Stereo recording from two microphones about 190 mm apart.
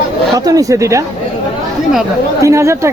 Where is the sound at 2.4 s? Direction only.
15° right (ahead or behind).